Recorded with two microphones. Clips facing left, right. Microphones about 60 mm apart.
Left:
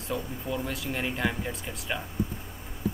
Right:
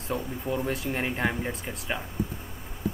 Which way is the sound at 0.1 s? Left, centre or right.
Right.